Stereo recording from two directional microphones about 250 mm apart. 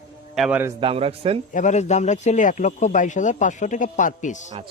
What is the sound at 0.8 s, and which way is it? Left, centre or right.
Speech, right.